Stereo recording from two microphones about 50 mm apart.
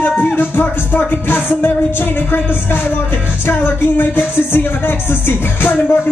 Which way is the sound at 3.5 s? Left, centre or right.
Left.